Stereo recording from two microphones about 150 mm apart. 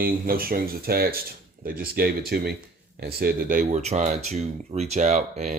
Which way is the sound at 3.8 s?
50° right (ahead or behind).